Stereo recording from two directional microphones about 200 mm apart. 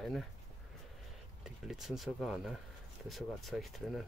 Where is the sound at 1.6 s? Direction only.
Centre (ahead or behind).